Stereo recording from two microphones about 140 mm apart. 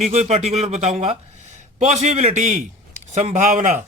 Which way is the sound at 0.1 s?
50° right (ahead or behind).